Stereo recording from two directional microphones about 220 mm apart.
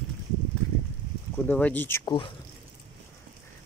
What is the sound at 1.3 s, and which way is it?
Speech, 5° left (ahead or behind).